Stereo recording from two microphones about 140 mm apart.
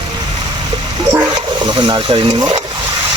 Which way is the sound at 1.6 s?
35° right (ahead or behind).